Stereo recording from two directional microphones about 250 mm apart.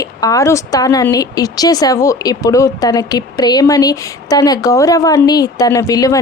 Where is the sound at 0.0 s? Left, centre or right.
Centre.